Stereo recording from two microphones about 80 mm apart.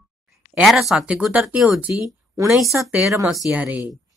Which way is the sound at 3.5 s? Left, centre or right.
Centre.